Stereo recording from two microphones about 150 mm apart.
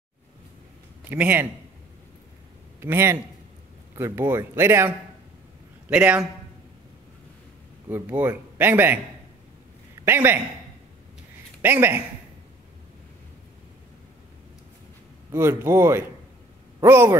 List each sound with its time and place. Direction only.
1.0 s a man's voice: 10° right (ahead or behind)
2.8 s a man's voice: 15° right (ahead or behind)
7.9 s a man's voice: 15° right (ahead or behind)
10.0 s a man's voice: 15° right (ahead or behind)
11.6 s a man's voice: 15° right (ahead or behind)
15.3 s a man's voice: 15° right (ahead or behind)